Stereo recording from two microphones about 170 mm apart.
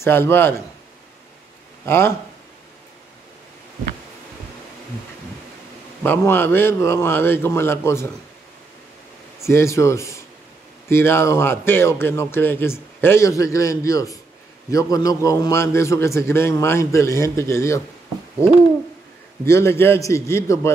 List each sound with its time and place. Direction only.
0.0 s speech: 15° left (ahead or behind)
1.9 s speech: 15° left (ahead or behind)
6.0 s speech: 15° left (ahead or behind)
9.4 s speech: 15° left (ahead or behind)